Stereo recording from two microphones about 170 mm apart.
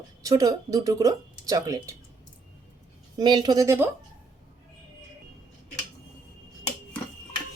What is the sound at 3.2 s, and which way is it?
Speech, 25° right (ahead or behind).